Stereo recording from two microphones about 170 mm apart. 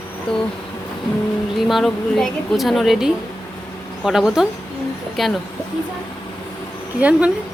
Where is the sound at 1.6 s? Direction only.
Centre (ahead or behind).